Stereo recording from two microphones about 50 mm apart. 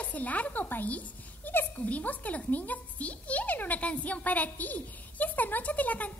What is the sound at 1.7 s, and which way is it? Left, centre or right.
A child's voice, left.